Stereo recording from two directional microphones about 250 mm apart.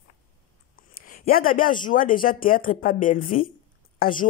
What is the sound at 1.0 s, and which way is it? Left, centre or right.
Speech, left.